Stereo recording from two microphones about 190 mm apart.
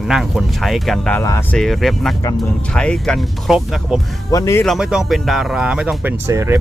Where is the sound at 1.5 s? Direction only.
Centre (ahead or behind).